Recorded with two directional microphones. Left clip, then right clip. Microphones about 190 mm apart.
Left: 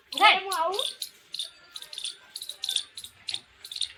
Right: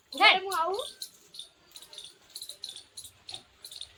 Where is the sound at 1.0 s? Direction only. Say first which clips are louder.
Left 5 dB; 75° right (ahead or behind).